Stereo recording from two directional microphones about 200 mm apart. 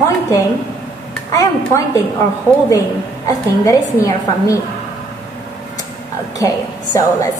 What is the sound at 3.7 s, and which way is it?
Speech, 15° left (ahead or behind).